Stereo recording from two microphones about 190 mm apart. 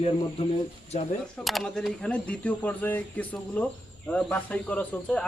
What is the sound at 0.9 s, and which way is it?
Speech, 35° left (ahead or behind).